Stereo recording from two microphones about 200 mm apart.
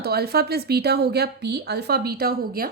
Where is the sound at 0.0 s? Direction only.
50° right (ahead or behind).